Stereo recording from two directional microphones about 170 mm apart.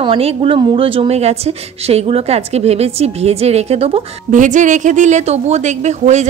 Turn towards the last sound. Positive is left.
turn(degrees=-45)  # may be behind; listen again after turning